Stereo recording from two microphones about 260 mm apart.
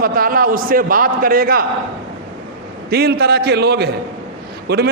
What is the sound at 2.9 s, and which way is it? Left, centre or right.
A man's voice, right.